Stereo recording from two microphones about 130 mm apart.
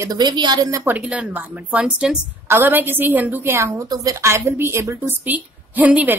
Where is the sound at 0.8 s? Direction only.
10° right (ahead or behind).